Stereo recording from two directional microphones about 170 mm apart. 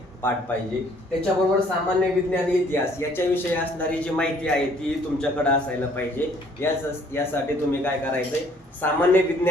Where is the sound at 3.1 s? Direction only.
10° left (ahead or behind).